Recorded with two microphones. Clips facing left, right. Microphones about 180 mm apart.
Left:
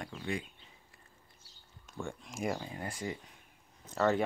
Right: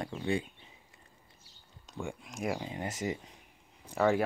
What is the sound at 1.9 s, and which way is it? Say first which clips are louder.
Speech: right 2 dB; 15° right (ahead or behind).